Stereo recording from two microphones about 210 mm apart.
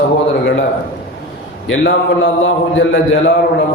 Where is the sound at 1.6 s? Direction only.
65° left (ahead or behind).